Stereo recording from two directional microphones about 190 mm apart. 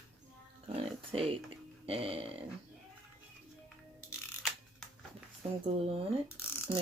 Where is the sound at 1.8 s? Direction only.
30° right (ahead or behind).